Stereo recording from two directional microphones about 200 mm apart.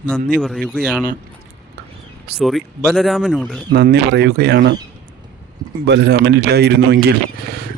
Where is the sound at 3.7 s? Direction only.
50° right (ahead or behind).